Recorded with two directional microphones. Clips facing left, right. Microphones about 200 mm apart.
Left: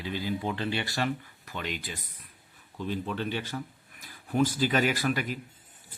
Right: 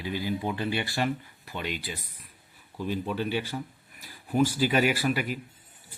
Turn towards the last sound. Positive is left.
turn(degrees=-10)  # may be behind; listen again after turning